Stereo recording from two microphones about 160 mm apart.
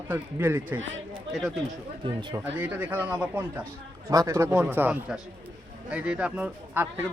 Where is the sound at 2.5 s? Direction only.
10° right (ahead or behind).